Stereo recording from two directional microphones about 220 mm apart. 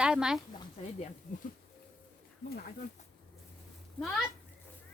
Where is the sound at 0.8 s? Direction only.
25° left (ahead or behind).